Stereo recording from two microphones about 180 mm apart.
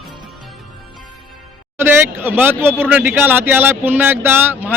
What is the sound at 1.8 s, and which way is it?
Speech, 10° right (ahead or behind).